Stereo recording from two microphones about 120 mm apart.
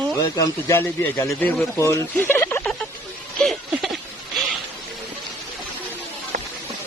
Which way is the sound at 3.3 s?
Centre (ahead or behind).